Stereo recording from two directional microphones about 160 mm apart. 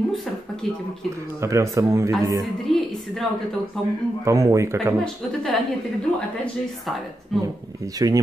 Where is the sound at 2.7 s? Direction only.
Centre (ahead or behind).